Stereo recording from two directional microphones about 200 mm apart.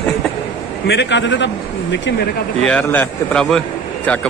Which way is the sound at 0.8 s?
60° left (ahead or behind).